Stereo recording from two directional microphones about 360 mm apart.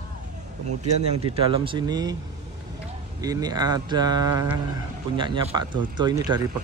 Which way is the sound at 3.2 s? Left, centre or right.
Centre.